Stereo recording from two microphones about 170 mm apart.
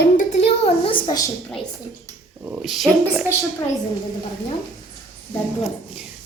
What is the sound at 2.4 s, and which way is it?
Speech, 5° right (ahead or behind).